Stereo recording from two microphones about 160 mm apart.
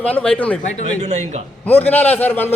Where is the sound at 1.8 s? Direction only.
10° left (ahead or behind).